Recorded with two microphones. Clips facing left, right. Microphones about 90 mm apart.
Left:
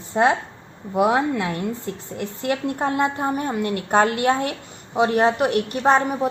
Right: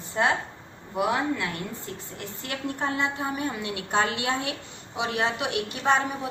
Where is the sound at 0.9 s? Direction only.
85° left.